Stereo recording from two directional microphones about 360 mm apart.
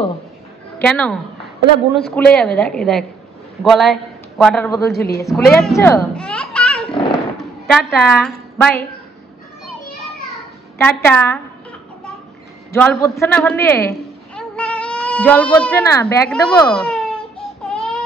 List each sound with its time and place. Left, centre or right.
0.7 s a woman's voice: centre
4.9 s a woman's voice: left
5.2 s a child's voice: centre
10.8 s a child's voice: centre
12.7 s a man's voice: centre